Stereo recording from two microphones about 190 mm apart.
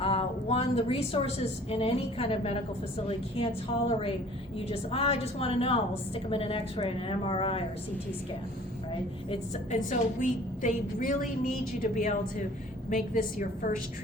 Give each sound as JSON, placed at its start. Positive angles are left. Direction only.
{"t": 0.0, "sound": "a woman's voice", "side_deg": 30}
{"t": 9.3, "sound": "a woman's voice", "side_deg": 40}